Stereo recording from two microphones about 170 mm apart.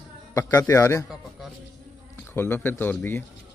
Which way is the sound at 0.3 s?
15° left (ahead or behind).